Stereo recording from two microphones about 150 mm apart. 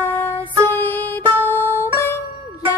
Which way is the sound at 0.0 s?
15° left (ahead or behind).